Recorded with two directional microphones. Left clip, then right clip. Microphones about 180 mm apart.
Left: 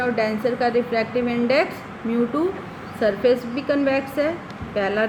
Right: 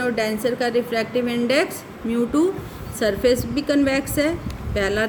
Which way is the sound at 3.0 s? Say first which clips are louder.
Even; 65° right (ahead or behind).